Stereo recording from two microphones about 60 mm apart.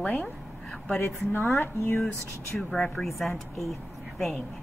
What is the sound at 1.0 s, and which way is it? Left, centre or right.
Speech, left.